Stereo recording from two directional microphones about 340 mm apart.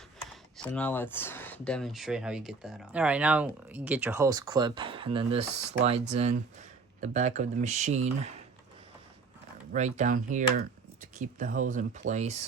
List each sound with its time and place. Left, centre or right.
0.5 s speech: centre
9.7 s speech: right